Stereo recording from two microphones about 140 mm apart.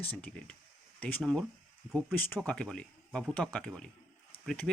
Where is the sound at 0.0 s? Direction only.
10° left (ahead or behind); by 2.1 s 5° right (ahead or behind).